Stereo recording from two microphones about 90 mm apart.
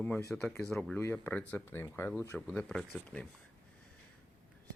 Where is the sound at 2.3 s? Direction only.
10° left (ahead or behind).